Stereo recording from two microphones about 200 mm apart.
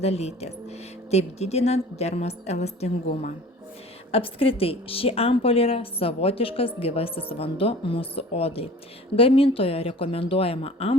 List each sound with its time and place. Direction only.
0.0 s a woman's voice: 30° left (ahead or behind)